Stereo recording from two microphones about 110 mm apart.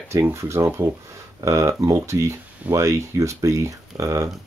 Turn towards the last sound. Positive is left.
turn(degrees=-30)  # may be behind; listen again after turning